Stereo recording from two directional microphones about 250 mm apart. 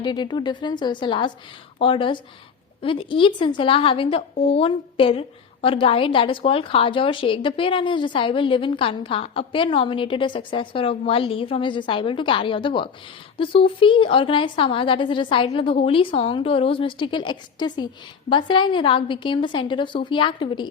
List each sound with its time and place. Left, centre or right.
0.0 s a woman's voice: centre